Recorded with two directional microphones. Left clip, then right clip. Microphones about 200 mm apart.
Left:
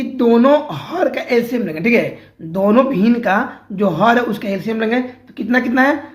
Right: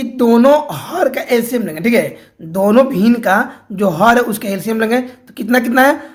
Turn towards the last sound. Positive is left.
turn(degrees=-35)  # may be behind; listen again after turning